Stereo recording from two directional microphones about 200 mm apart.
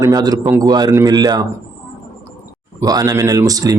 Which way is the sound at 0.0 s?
20° right (ahead or behind).